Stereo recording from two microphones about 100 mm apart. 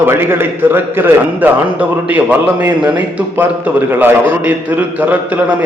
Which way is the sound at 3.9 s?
15° right (ahead or behind).